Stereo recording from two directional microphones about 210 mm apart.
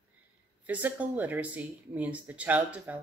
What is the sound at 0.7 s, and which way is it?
Speech, 5° right (ahead or behind).